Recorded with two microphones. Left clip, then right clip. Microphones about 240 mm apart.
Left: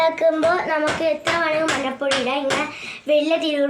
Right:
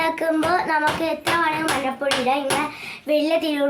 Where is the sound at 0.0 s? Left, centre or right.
Right.